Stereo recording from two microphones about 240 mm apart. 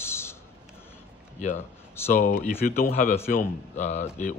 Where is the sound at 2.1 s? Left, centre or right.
Left.